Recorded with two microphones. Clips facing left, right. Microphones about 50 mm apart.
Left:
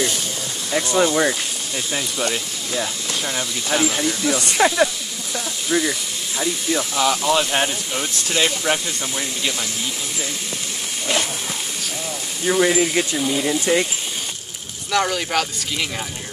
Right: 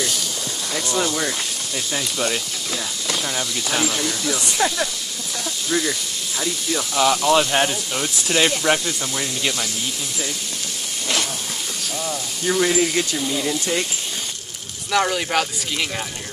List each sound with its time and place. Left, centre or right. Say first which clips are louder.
0.9 s speech: left 6 dB; centre
1.9 s speech: even; centre
4.6 s speech: left 6 dB; left
5.7 s speech: left 2 dB; centre
7.0 s speech: right 3 dB; centre
12.4 s speech: left 2 dB; centre
14.9 s speech: even; centre